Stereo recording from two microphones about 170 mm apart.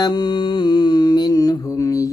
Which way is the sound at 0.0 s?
25° left (ahead or behind).